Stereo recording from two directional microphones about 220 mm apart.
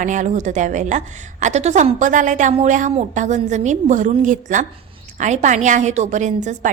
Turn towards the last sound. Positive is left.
turn(degrees=-35)  # may be behind; listen again after turning